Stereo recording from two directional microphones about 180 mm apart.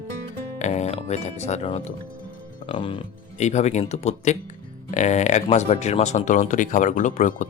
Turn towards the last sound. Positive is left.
turn(degrees=45)  # may be behind; listen again after turning